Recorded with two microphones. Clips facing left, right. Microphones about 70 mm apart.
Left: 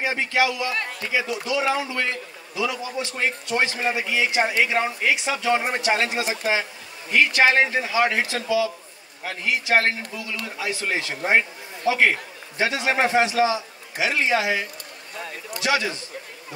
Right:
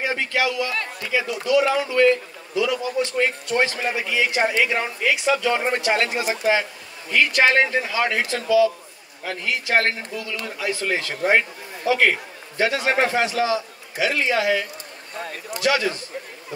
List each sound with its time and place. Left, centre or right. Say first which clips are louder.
0.0 s a man's voice: left 1 dB; left